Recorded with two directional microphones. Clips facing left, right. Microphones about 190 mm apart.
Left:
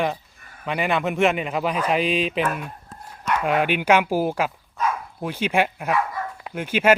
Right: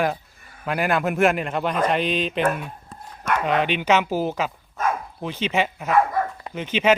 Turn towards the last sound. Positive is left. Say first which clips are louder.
# left 1 dB
turn(degrees=10)  # may be behind; listen again after turning